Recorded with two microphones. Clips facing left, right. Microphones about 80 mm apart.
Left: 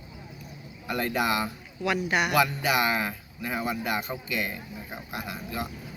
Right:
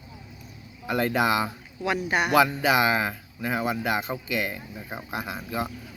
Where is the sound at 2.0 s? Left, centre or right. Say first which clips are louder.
Right 2 dB; right.